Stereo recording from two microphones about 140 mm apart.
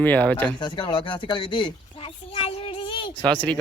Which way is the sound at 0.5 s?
35° left (ahead or behind).